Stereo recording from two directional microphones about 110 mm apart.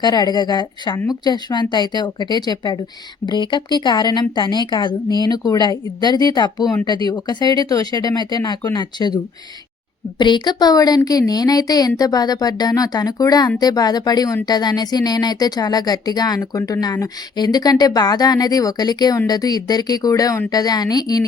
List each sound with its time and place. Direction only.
0.0 s speech: 40° left (ahead or behind)